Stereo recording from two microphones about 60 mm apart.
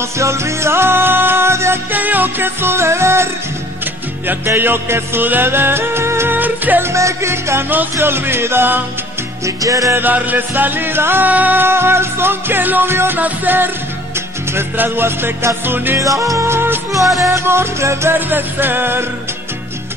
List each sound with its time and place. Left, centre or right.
0.2 s music: right
1.9 s music: right
4.6 s music: right
6.3 s music: right
6.8 s music: right
9.6 s music: right
9.9 s music: right
16.0 s music: right
17.2 s music: right
18.3 s music: right